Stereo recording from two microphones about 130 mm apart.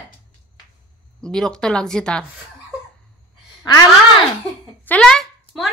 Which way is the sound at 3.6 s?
30° left (ahead or behind).